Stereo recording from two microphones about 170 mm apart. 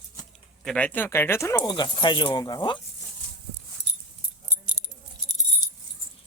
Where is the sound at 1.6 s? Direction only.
25° left (ahead or behind).